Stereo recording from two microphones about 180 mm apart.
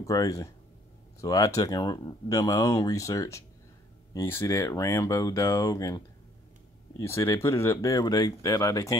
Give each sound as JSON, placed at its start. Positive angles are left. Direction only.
{"t": 0.0, "sound": "speech", "side_deg": 20}